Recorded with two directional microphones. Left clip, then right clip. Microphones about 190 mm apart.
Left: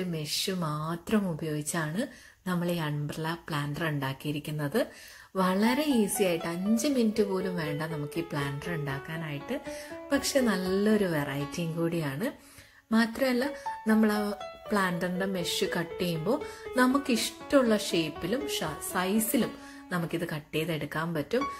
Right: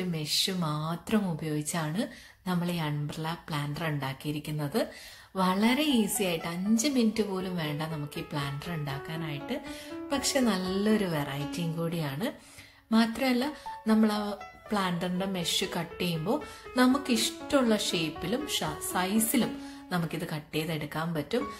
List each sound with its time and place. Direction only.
0.1 s speech: 15° left (ahead or behind)